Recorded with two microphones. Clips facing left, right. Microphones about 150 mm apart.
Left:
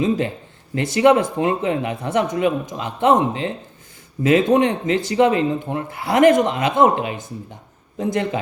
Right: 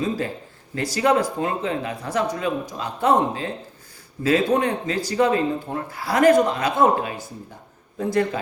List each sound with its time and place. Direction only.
0.8 s speech: 25° left (ahead or behind)